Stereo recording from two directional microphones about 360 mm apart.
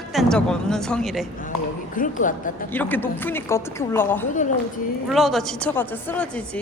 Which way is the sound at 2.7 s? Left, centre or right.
Centre.